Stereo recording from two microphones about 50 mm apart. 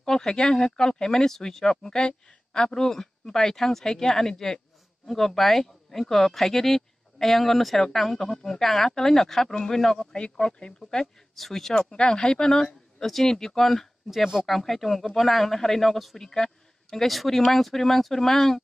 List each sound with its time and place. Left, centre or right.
0.0 s speech: centre
12.0 s speech: centre
14.1 s speech: centre